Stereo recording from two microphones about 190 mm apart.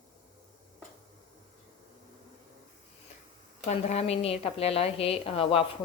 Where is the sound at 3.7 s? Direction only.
35° left (ahead or behind).